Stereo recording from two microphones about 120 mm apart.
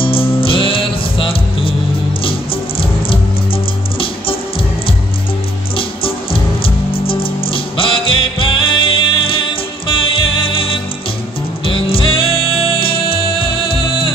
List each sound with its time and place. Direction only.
0.0 s music: 50° left (ahead or behind)
6.6 s music: 50° left (ahead or behind)